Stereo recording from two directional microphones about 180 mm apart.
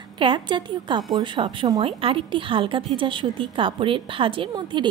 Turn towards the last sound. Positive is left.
turn(degrees=-25)  # may be behind; listen again after turning